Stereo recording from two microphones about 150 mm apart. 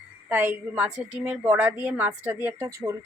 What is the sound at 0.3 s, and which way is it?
Speech, 15° right (ahead or behind).